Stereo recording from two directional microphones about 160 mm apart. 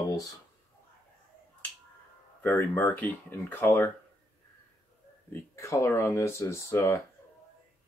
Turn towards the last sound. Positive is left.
turn(degrees=15)  # may be behind; listen again after turning